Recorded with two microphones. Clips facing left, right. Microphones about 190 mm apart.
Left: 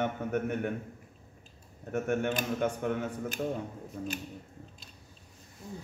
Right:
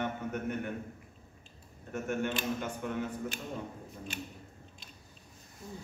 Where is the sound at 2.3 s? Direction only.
50° left (ahead or behind).